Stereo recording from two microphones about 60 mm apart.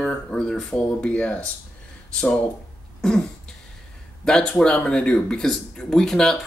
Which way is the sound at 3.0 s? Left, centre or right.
Centre.